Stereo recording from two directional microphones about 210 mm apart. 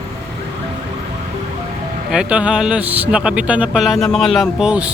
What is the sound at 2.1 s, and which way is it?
Speech, 5° right (ahead or behind).